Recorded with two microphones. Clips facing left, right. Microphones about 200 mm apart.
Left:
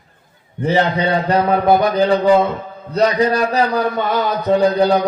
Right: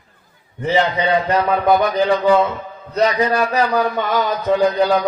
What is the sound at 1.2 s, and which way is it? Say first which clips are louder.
Speech: left 2 dB; 35° left (ahead or behind).